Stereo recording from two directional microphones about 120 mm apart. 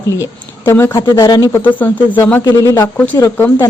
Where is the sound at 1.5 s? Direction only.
15° left (ahead or behind).